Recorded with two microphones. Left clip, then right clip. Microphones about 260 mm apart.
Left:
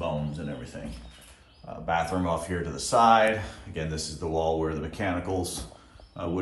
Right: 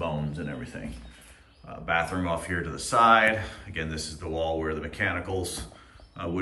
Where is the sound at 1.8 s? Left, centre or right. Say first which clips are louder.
Even; centre.